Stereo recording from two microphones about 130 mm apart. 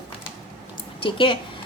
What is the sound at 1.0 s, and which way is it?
Speech, 40° left (ahead or behind).